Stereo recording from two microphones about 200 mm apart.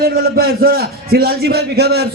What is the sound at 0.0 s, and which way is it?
A man's voice, 50° right (ahead or behind).